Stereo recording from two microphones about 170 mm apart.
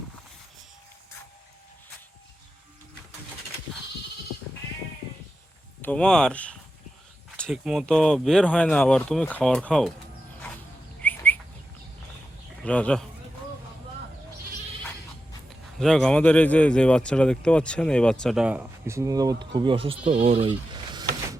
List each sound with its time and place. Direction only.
5.8 s speech: 5° left (ahead or behind)
11.0 s bird: 10° left (ahead or behind)
12.6 s speech: 5° left (ahead or behind)
15.8 s speech: 5° left (ahead or behind); by 21.1 s 30° right (ahead or behind)